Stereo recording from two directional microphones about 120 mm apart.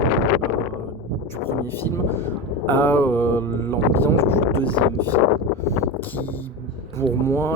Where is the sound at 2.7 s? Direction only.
15° left (ahead or behind).